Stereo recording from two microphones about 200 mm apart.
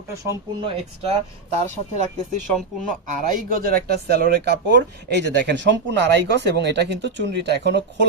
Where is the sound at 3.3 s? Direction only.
40° right (ahead or behind).